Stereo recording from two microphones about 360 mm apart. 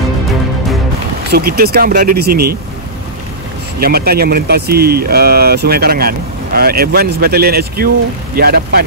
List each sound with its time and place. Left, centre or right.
1.3 s speech: right
3.8 s speech: right